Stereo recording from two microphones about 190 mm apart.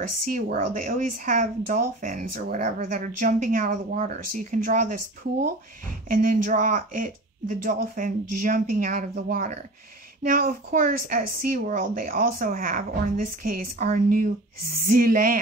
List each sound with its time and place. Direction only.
0.3 s a woman's voice: 45° right (ahead or behind)
6.0 s a woman's voice: 45° right (ahead or behind)